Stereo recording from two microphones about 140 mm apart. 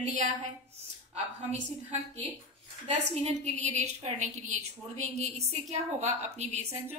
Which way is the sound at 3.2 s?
55° right (ahead or behind).